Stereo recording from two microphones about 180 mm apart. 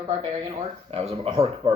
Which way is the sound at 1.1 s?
35° right (ahead or behind).